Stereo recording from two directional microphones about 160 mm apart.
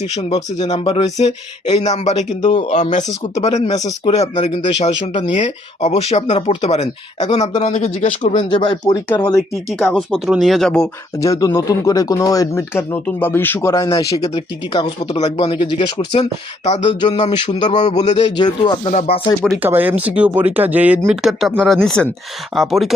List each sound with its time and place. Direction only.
0.2 s speech: 45° left (ahead or behind); by 9.3 s 25° left (ahead or behind)
9.8 s speech: centre (ahead or behind)
11.2 s speech: 20° left (ahead or behind)
14.3 s speech: 30° left (ahead or behind)
16.6 s speech: 45° left (ahead or behind)
17.3 s speech: 30° left (ahead or behind)
17.7 s speech: 45° left (ahead or behind)
18.3 s speech: 30° left (ahead or behind)
18.9 s speech: 50° left (ahead or behind)
19.6 s speech: 10° right (ahead or behind)